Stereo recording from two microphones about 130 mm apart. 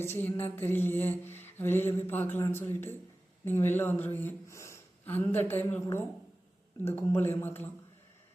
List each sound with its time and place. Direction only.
0.0 s speech: 15° left (ahead or behind)